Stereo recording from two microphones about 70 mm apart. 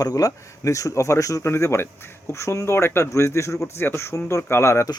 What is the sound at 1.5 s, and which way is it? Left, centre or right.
Speech, left.